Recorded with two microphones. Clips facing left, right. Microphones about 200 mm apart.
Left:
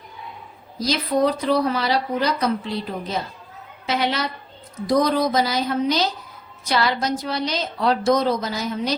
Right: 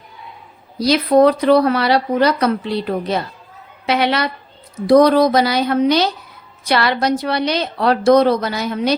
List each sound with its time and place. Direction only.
0.8 s speech: 65° right (ahead or behind)